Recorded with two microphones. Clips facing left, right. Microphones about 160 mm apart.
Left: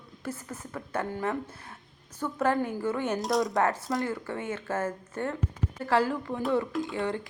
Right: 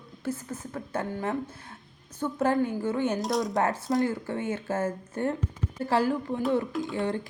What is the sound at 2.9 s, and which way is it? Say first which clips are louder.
Speech: right 1 dB; centre (ahead or behind).